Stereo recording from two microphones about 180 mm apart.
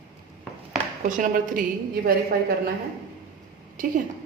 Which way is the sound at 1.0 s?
45° right (ahead or behind).